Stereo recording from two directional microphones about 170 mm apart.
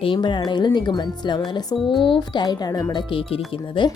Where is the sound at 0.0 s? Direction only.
30° left (ahead or behind).